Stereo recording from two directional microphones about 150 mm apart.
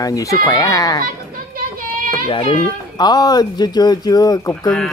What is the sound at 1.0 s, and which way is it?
Children playing, 70° right (ahead or behind).